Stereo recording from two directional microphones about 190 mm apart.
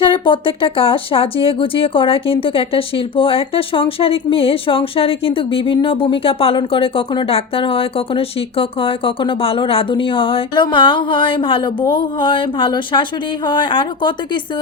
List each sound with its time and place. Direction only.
0.0 s speech: 25° left (ahead or behind)